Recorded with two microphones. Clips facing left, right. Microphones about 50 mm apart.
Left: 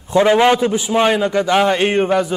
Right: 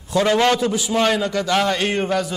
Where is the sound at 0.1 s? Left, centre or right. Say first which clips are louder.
Left 5 dB; left.